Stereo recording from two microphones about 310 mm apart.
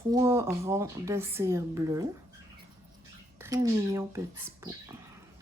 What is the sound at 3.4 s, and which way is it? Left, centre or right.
Speech, centre.